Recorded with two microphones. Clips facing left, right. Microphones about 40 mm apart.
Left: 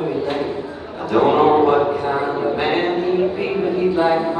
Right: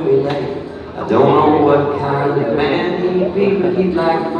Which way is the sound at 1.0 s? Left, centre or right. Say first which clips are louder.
Right 3 dB; right.